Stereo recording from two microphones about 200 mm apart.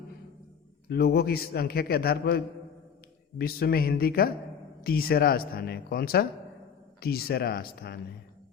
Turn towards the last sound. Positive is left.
turn(degrees=50)  # may be behind; listen again after turning